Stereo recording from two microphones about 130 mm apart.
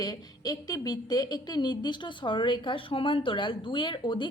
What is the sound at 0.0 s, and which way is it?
A woman's voice, 30° left (ahead or behind).